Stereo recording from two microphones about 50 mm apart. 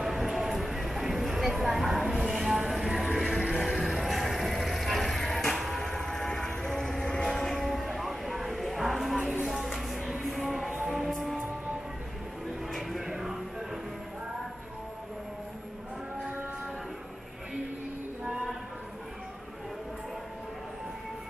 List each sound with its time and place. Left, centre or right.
0.0 s music: centre
3.6 s music: centre
5.5 s a sound: centre
5.9 s train: centre
9.4 s music: centre
10.7 s music: centre
11.1 s music: centre
12.7 s music: centre